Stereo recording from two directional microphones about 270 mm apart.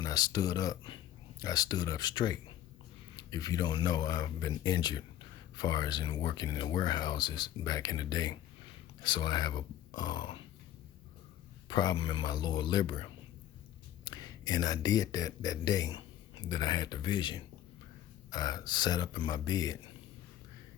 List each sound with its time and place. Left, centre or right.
0.0 s speech: centre
11.7 s speech: centre